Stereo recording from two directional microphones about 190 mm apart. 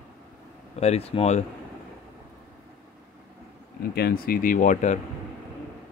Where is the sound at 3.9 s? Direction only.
55° left (ahead or behind).